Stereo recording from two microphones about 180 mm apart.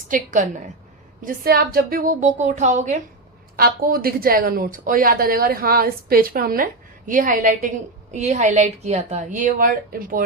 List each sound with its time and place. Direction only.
0.1 s a woman's voice: 45° right (ahead or behind)
3.5 s a woman's voice: 55° right (ahead or behind)